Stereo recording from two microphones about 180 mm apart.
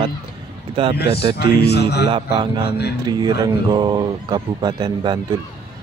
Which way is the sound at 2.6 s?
65° left (ahead or behind).